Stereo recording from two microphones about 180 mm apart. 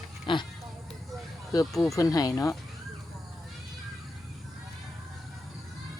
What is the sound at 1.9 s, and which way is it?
Speech, 20° left (ahead or behind).